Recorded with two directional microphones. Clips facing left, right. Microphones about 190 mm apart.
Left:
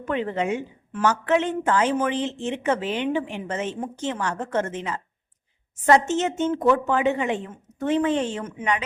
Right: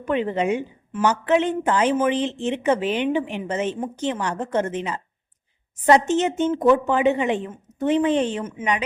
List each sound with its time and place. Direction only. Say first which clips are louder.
0.0 s a woman's voice: right 3 dB; 20° right (ahead or behind)